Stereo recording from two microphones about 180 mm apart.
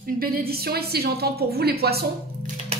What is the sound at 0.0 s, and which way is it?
A woman's voice, 55° right (ahead or behind).